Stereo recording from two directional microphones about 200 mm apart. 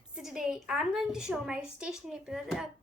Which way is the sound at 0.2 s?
Centre (ahead or behind).